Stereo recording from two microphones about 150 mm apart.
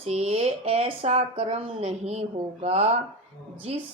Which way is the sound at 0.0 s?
45° right (ahead or behind).